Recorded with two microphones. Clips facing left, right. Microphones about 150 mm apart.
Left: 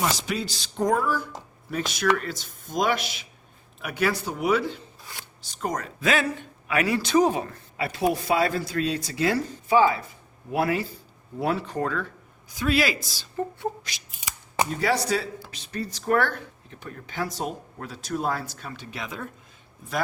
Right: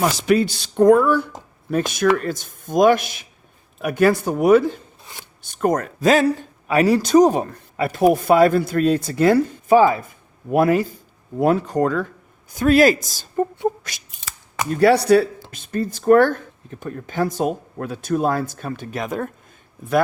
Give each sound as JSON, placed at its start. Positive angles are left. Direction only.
{"t": 0.0, "sound": "speech", "side_deg": -60}
{"t": 1.7, "sound": "speech", "side_deg": -50}
{"t": 14.1, "sound": "shuffling cards", "side_deg": 10}
{"t": 14.8, "sound": "speech", "side_deg": -65}
{"t": 15.4, "sound": "speech", "side_deg": -50}